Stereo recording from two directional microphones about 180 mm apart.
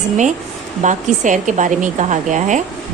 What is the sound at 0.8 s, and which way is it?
Speech, 45° right (ahead or behind).